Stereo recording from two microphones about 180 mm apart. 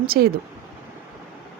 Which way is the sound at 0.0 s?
60° right (ahead or behind).